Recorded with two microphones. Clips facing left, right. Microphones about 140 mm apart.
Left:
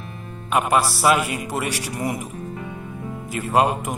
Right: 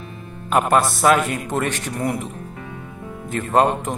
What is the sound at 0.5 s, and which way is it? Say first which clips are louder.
A man's voice: right 2 dB; 5° left (ahead or behind).